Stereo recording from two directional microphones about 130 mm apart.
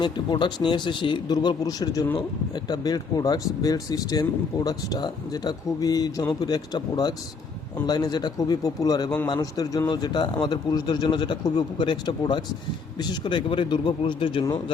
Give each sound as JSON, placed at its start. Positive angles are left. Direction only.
{"t": 0.0, "sound": "a man's voice", "side_deg": 35}